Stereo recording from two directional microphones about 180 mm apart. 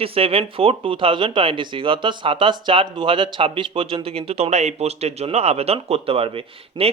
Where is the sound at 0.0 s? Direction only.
30° right (ahead or behind).